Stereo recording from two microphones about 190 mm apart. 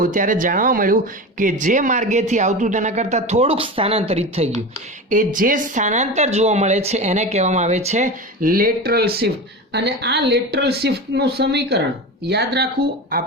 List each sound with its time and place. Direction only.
0.0 s speech: 45° right (ahead or behind)
5.0 s speech: 45° right (ahead or behind); by 12.6 s 60° right (ahead or behind)